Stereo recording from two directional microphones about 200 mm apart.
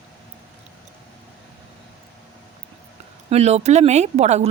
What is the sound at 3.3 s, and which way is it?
A woman's voice, 30° right (ahead or behind).